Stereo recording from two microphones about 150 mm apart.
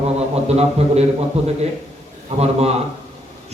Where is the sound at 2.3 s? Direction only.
45° right (ahead or behind).